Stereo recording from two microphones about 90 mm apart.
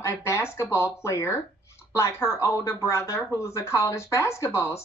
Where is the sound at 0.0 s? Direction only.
30° left (ahead or behind).